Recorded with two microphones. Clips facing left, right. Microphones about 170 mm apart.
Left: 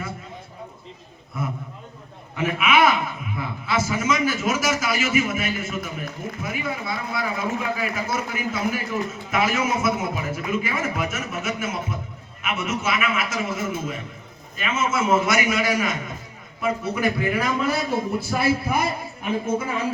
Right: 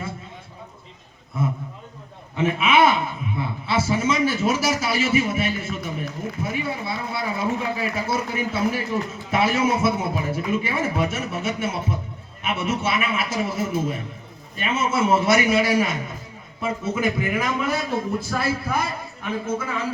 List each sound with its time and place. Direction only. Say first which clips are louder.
1.4 s a man's voice: right 3 dB; 25° right (ahead or behind)
17.9 s a man's voice: left 1 dB; 10° left (ahead or behind)